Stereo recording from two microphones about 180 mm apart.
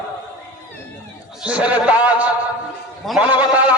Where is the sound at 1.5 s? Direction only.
5° right (ahead or behind).